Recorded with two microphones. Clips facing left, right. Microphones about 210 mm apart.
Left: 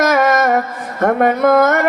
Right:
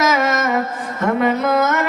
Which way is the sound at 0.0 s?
55° left (ahead or behind).